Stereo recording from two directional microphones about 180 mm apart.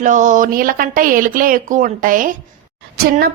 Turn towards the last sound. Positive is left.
turn(degrees=-60)  # may be behind; listen again after turning